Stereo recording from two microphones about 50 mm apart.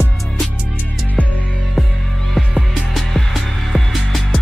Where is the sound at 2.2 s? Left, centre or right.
Centre.